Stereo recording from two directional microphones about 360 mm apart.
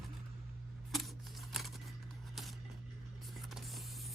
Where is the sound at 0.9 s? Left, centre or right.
Centre.